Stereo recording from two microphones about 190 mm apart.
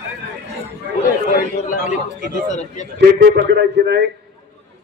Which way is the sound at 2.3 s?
40° left (ahead or behind).